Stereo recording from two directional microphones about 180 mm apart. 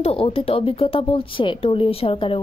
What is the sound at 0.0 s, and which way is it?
Speech, 30° left (ahead or behind).